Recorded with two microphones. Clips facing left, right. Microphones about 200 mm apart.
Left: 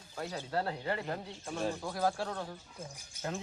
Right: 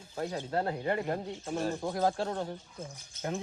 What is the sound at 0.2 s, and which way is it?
Speech, 20° right (ahead or behind).